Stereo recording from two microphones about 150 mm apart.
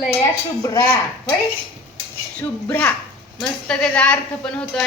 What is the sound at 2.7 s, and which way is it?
A woman's voice, 15° left (ahead or behind).